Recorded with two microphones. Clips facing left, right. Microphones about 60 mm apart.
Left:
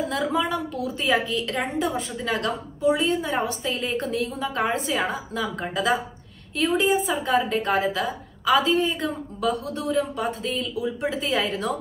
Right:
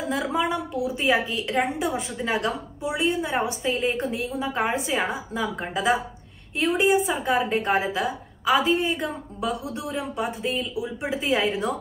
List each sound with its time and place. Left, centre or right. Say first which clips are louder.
0.1 s a woman's voice: even; centre